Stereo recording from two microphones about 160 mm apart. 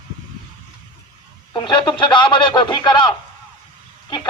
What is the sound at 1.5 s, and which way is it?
Speech, 30° left (ahead or behind).